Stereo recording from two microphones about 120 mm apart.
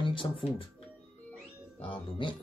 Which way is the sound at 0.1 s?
45° left (ahead or behind).